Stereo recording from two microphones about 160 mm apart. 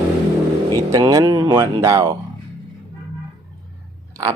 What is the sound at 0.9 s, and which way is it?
Speech, 20° right (ahead or behind).